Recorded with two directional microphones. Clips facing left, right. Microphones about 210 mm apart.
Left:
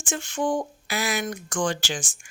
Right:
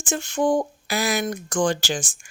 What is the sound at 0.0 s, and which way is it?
Speech, 40° right (ahead or behind).